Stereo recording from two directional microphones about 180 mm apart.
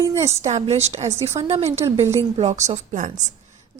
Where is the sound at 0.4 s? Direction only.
35° right (ahead or behind).